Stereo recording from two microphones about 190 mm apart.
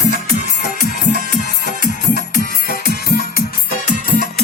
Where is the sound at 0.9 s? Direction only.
55° left (ahead or behind).